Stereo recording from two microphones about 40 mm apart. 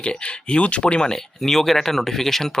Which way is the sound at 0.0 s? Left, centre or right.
Left.